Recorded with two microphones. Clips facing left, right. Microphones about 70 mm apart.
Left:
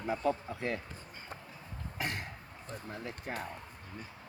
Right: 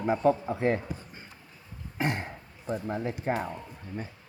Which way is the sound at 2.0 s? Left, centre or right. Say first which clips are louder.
Right 8 dB; right.